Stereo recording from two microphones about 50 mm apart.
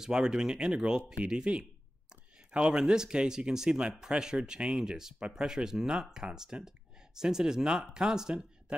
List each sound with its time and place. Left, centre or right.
0.0 s speech: centre